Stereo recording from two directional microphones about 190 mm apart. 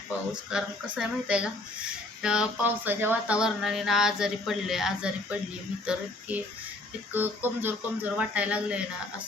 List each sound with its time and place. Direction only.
0.5 s speech: 5° right (ahead or behind)